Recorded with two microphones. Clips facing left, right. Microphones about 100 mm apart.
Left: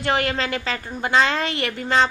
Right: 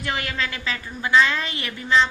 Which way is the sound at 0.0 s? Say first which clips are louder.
Left 5 dB; 35° left (ahead or behind).